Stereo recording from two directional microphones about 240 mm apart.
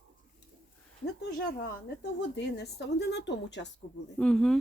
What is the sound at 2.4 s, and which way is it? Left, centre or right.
Speech, left.